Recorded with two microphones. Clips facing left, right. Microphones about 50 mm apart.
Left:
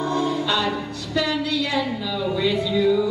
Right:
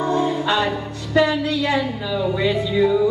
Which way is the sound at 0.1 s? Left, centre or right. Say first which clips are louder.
Right 3 dB; right.